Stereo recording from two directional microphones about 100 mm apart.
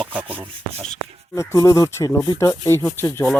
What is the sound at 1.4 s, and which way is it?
Speech, 30° left (ahead or behind).